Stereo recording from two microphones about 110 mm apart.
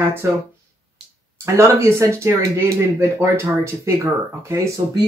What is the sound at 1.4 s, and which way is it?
Speech, 25° right (ahead or behind).